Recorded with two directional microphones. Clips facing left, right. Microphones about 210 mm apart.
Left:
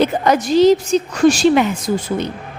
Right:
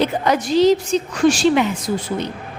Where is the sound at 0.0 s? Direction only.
45° left (ahead or behind).